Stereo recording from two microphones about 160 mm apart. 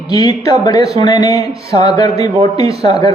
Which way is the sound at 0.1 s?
25° left (ahead or behind).